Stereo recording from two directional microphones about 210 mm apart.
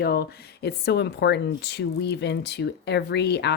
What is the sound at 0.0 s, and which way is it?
Speech, 45° left (ahead or behind).